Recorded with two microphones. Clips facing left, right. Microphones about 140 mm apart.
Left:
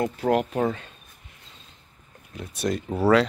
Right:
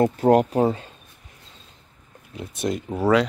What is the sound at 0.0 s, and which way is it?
Speech, 35° right (ahead or behind).